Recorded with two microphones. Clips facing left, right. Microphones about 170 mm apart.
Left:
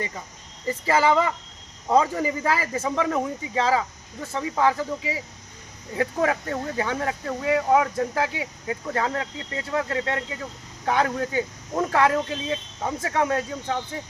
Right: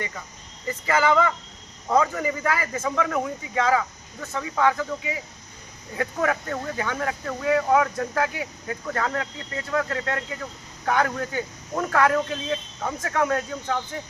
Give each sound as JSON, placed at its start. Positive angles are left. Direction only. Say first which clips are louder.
{"t": 0.7, "sound": "speech", "louder": "left 1 dB", "side_deg": 30}